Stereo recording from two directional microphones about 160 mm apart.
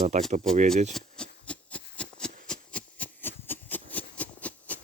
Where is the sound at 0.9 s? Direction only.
5° left (ahead or behind).